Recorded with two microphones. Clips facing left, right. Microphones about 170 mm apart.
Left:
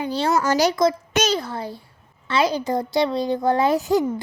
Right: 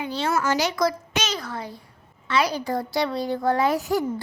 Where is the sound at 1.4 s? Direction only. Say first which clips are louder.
Left 4 dB; 30° left (ahead or behind).